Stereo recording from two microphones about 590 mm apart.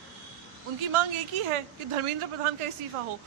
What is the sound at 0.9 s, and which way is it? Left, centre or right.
Speech, right.